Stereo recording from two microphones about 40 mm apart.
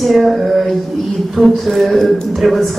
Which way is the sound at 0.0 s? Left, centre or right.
Centre.